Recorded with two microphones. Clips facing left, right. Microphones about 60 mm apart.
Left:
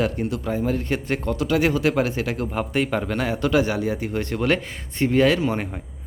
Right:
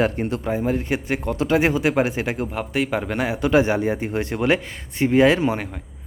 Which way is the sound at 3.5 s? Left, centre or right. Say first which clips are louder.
Right 5 dB; right.